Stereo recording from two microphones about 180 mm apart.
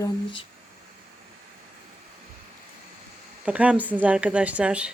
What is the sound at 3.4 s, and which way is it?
Speech, 5° right (ahead or behind).